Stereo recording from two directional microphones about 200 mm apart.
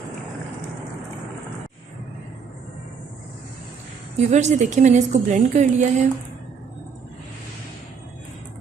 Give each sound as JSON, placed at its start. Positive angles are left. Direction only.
{"t": 4.2, "sound": "a woman's voice", "side_deg": -35}